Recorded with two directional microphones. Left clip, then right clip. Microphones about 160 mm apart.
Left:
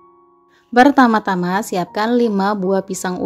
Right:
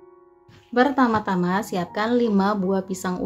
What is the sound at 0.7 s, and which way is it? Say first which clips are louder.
Speech: left 8 dB; 60° left (ahead or behind).